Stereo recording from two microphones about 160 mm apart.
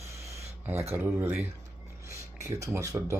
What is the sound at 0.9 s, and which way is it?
Speech, 10° right (ahead or behind).